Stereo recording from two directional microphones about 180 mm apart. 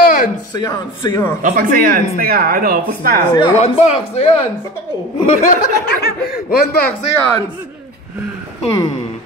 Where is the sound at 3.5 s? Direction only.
35° left (ahead or behind).